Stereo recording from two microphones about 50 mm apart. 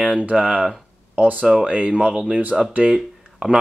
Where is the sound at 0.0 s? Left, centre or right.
Centre.